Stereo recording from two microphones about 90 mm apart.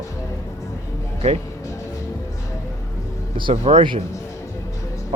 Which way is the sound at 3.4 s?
70° right (ahead or behind).